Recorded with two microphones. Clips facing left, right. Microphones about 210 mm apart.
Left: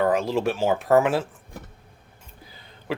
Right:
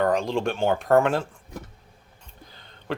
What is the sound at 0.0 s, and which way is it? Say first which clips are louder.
Speech: left 1 dB; 5° left (ahead or behind).